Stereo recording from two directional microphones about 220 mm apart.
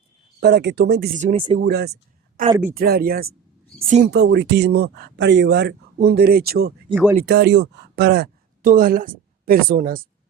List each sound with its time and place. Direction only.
0.3 s speech: 45° right (ahead or behind)
1.1 s speech: 35° right (ahead or behind)
1.5 s speech: 45° right (ahead or behind)
3.8 s speech: 30° right (ahead or behind)
4.0 s speech: 50° right (ahead or behind)
6.9 s speech: 5° right (ahead or behind)
7.2 s speech: 50° right (ahead or behind)